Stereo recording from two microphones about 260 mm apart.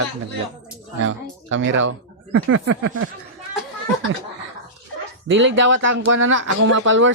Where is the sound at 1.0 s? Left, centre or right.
Right.